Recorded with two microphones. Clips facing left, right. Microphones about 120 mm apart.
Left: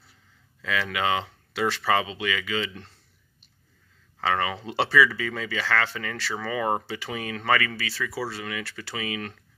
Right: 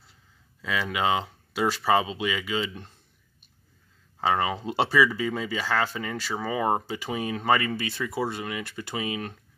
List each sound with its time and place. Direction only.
0.6 s speech: 15° right (ahead or behind)
4.2 s speech: 15° right (ahead or behind)